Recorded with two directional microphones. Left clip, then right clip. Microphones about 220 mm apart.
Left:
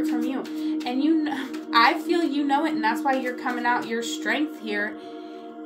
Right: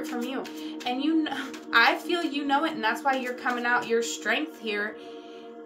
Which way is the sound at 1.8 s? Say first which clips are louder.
Left 3 dB; 15° right (ahead or behind).